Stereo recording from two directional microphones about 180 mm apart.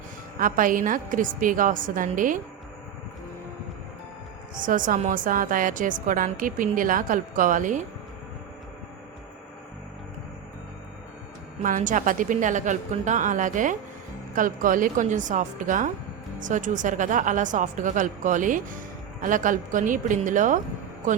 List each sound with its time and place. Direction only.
0.3 s a woman's voice: 50° right (ahead or behind)
4.5 s a woman's voice: 45° right (ahead or behind)
11.6 s a woman's voice: 45° right (ahead or behind)